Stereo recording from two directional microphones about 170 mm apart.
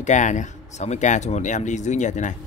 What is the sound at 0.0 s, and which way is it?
Speech, 45° left (ahead or behind).